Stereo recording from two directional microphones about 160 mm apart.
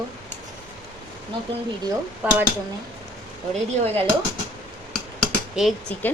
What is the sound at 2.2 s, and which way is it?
Speech, 10° right (ahead or behind).